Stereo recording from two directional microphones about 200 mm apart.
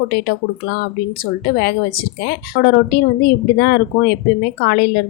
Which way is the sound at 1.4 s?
50° left (ahead or behind).